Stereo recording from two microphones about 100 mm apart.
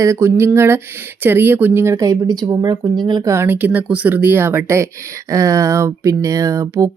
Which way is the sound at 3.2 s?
25° right (ahead or behind).